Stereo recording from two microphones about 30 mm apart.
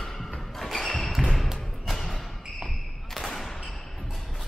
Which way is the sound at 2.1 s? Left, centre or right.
Centre.